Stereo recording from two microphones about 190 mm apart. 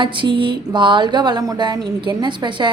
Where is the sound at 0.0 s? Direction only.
25° right (ahead or behind).